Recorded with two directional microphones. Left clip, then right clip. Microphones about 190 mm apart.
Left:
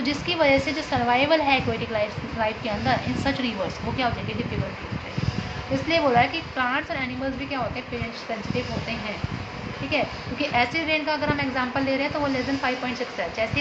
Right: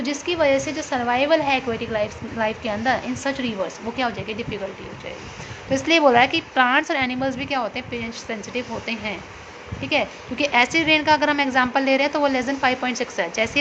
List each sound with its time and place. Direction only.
0.0 s a woman's voice: 35° right (ahead or behind)
5.7 s a woman's voice: 65° right (ahead or behind)
9.9 s a woman's voice: 60° right (ahead or behind)